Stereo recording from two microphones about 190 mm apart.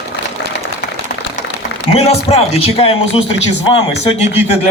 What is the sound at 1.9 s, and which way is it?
A man's voice, 35° left (ahead or behind).